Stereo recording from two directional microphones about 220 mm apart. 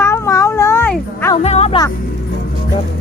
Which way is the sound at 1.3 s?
30° left (ahead or behind).